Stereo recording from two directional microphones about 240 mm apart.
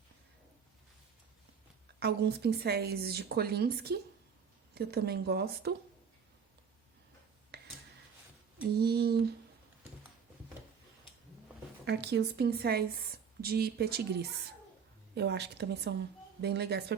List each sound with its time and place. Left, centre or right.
2.0 s speech: right
7.5 s cash register: right
8.8 s speech: right
11.9 s a woman's voice: right